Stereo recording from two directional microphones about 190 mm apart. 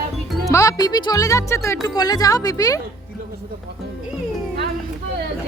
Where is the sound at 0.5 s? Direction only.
20° left (ahead or behind).